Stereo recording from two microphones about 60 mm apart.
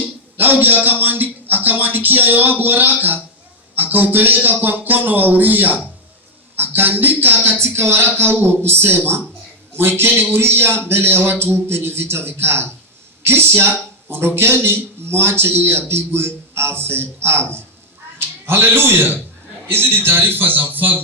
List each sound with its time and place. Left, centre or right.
0.3 s a man's voice: right
7.6 s a man's voice: right